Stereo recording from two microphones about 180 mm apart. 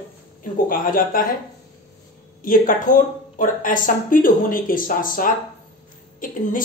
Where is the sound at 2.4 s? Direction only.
50° left (ahead or behind).